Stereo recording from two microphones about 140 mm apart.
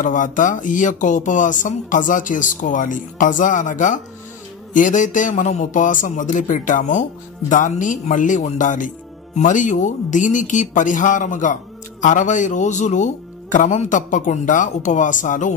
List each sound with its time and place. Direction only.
0.0 s a man's voice: 65° left (ahead or behind)